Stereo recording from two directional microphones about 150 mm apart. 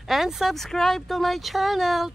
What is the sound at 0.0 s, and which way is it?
Speech, centre (ahead or behind).